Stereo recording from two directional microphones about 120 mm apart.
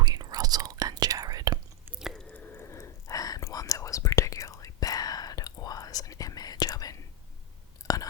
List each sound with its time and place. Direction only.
0.0 s whispering: 35° right (ahead or behind)
2.0 s chewing: centre (ahead or behind)
2.3 s whispering: 15° left (ahead or behind); by 7.0 s 30° left (ahead or behind)
7.8 s chewing: 30° left (ahead or behind)